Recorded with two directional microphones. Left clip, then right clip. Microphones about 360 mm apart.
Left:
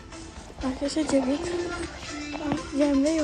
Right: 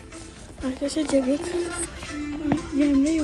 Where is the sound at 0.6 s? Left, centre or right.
Centre.